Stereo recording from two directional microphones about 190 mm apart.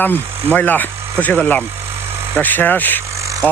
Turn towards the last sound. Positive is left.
turn(degrees=10)  # may be behind; listen again after turning